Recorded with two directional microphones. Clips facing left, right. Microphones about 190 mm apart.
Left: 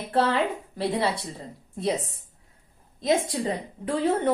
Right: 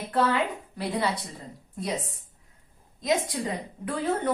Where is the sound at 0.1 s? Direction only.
30° left (ahead or behind).